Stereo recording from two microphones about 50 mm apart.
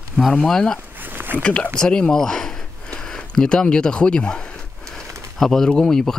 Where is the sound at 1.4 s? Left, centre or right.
Left.